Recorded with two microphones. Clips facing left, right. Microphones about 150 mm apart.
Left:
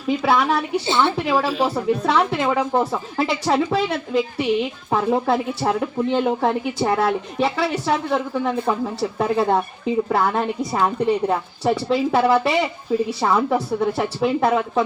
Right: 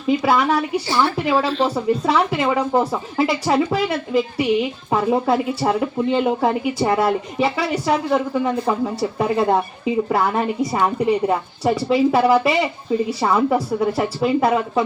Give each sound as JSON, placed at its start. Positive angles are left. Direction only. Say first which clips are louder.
{"t": 0.1, "sound": "a woman's voice", "louder": "right 2 dB", "side_deg": 0}
{"t": 0.9, "sound": "a woman's voice", "louder": "left 1 dB", "side_deg": 20}
{"t": 1.2, "sound": "a woman's voice", "louder": "right 1 dB", "side_deg": -5}
{"t": 1.5, "sound": "a woman's voice", "louder": "right 1 dB", "side_deg": 5}
{"t": 2.0, "sound": "a woman's voice", "louder": "even", "side_deg": -5}